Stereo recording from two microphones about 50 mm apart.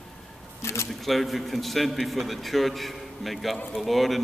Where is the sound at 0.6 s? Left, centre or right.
Left.